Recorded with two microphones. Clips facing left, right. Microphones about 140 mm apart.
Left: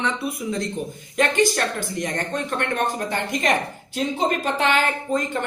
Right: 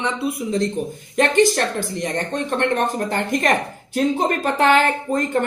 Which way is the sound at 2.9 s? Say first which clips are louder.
Right 4 dB; 45° right (ahead or behind).